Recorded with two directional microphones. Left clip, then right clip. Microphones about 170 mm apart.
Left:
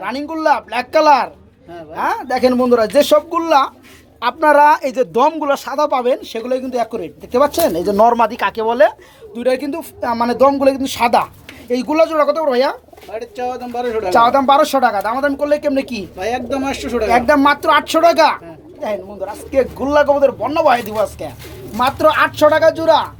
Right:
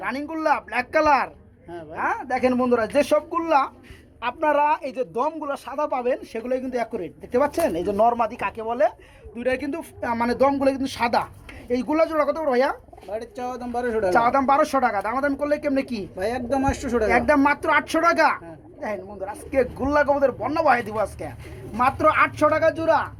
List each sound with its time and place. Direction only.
0.0 s speech: 10° left (ahead or behind)
2.0 s speech: 15° left (ahead or behind)
6.3 s speech: 10° left (ahead or behind)
11.7 s speech: 5° left (ahead or behind)
13.1 s speech: 45° right (ahead or behind)
14.1 s speech: 10° left (ahead or behind)
15.4 s speech: 5° right (ahead or behind)
16.1 s speech: 15° right (ahead or behind)
16.5 s speech: 40° right (ahead or behind)
17.1 s speech: 5° left (ahead or behind)